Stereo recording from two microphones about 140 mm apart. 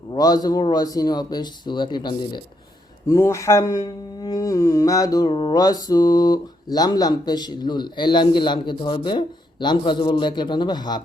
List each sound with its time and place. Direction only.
0.1 s speech: 25° left (ahead or behind)
3.1 s speech: 20° left (ahead or behind)